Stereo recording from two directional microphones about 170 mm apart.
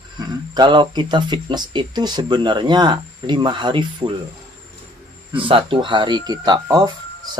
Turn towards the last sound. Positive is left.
turn(degrees=-25)  # may be behind; listen again after turning